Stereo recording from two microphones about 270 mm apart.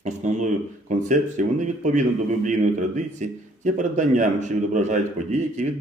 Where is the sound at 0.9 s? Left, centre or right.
Right.